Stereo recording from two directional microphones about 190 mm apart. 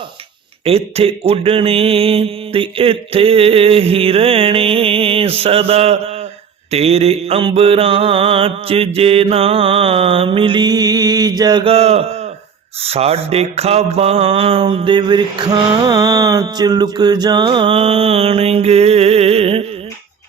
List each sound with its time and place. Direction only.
0.6 s mantra: 30° right (ahead or behind)